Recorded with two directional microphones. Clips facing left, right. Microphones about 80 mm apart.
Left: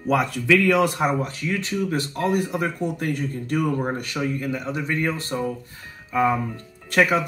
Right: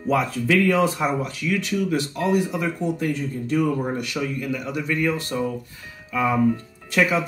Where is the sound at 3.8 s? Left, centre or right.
Left.